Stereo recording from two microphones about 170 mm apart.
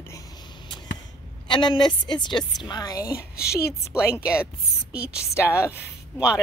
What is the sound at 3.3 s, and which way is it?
Speech, 65° left (ahead or behind).